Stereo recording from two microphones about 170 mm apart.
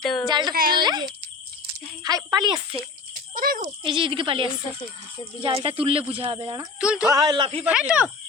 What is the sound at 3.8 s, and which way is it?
Speech, 30° right (ahead or behind).